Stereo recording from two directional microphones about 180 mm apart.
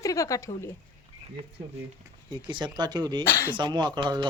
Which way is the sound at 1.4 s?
25° right (ahead or behind).